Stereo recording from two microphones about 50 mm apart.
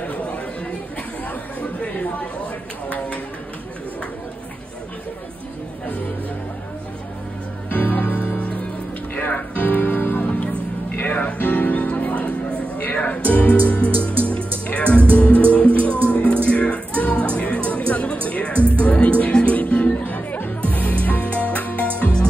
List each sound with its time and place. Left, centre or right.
7.7 s music: left